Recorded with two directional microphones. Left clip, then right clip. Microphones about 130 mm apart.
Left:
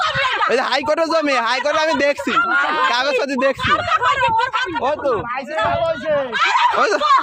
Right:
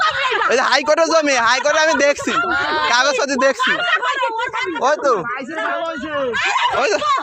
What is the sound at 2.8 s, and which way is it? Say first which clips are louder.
Speech: right 2 dB; 35° left (ahead or behind).